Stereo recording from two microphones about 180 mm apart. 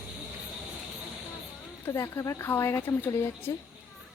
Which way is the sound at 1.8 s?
15° left (ahead or behind).